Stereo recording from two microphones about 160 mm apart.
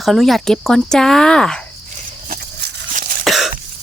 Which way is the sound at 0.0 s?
Centre (ahead or behind).